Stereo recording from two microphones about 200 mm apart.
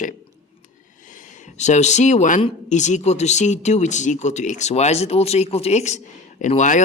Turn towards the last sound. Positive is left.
turn(degrees=40)  # may be behind; listen again after turning